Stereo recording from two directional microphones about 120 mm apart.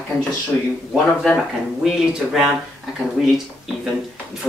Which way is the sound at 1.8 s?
Centre (ahead or behind).